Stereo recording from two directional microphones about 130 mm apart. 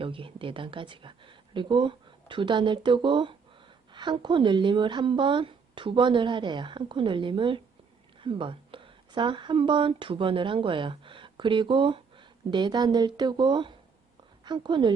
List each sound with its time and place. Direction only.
0.0 s speech: 45° right (ahead or behind)